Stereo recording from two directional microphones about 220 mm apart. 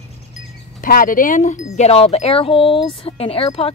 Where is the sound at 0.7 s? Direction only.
40° left (ahead or behind).